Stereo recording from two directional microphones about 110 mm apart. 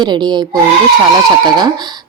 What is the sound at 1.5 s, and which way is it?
Speech, 40° right (ahead or behind).